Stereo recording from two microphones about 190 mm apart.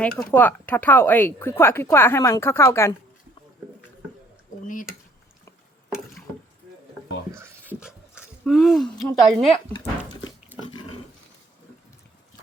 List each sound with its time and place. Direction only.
0.2 s speech: 10° left (ahead or behind)
4.6 s speech: 45° left (ahead or behind)
7.3 s speech: 15° right (ahead or behind)
10.5 s pig: 10° right (ahead or behind)